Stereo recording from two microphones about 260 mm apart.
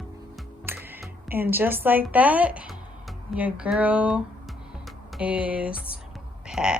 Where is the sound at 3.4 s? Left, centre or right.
Centre.